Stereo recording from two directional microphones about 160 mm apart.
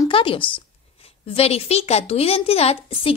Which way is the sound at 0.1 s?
35° left (ahead or behind).